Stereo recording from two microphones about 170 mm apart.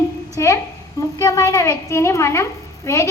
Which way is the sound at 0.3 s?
20° left (ahead or behind).